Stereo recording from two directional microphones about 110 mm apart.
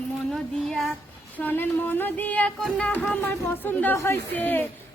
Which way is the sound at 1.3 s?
15° left (ahead or behind).